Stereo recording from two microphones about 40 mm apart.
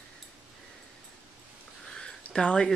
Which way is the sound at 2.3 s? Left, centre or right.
Centre.